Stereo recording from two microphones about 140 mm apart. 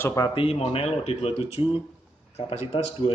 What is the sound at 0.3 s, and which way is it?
A man's voice, 40° left (ahead or behind).